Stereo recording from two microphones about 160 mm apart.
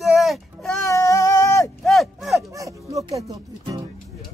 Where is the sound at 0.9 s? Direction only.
20° left (ahead or behind).